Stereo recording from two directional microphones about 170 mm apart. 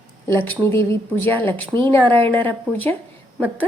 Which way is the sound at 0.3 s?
10° left (ahead or behind).